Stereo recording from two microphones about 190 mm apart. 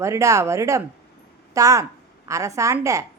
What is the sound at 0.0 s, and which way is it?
A woman's voice, 15° right (ahead or behind).